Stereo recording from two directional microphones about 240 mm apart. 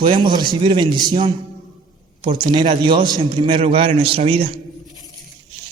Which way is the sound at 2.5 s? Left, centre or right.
Centre.